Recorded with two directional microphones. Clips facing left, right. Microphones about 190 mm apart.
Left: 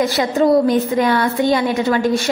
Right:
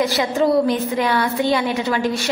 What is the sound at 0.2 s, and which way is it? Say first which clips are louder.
A woman's voice: left 4 dB; 45° left (ahead or behind).